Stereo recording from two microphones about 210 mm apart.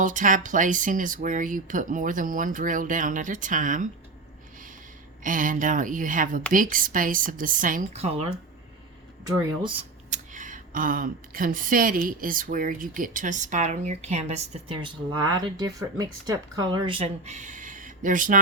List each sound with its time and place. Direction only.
0.0 s a woman's voice: 40° right (ahead or behind)
5.2 s a woman's voice: 40° right (ahead or behind)
9.6 s a sound: 25° right (ahead or behind)
10.3 s a woman's voice: 40° right (ahead or behind)